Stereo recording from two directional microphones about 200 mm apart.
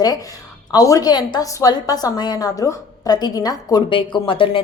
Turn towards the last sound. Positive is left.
turn(degrees=25)  # may be behind; listen again after turning